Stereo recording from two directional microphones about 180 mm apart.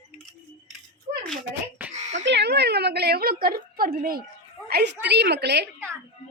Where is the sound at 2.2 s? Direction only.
70° right (ahead or behind); by 4.3 s 55° right (ahead or behind).